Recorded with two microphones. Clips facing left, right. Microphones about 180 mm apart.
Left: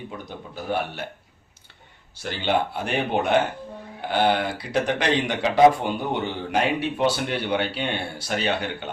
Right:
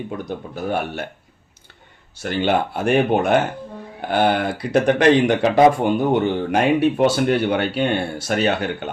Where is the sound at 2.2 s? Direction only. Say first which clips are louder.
Right 4 dB; 50° right (ahead or behind).